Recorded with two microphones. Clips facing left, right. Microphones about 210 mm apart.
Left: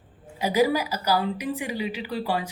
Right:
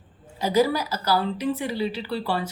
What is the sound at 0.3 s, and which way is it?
A woman's voice, 15° left (ahead or behind).